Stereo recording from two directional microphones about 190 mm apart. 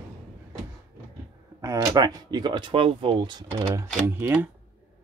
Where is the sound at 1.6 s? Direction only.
15° right (ahead or behind).